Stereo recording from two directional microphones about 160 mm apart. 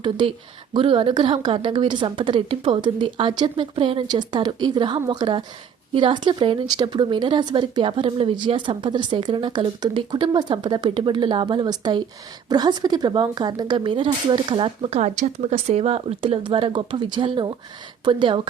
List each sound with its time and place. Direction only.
0.0 s a woman's voice: 30° right (ahead or behind)